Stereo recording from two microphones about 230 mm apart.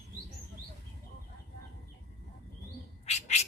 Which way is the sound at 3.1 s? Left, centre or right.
Left.